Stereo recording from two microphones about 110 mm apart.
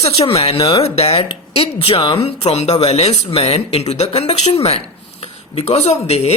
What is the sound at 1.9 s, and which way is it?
Speech, 40° left (ahead or behind).